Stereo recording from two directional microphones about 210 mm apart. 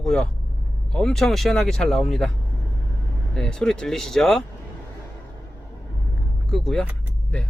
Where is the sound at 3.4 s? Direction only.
5° left (ahead or behind).